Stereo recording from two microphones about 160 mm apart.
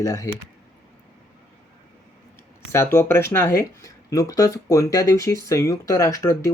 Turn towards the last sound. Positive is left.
turn(degrees=20)  # may be behind; listen again after turning